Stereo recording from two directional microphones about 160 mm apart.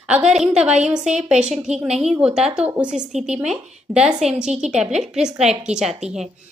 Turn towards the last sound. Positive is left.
turn(degrees=-5)  # may be behind; listen again after turning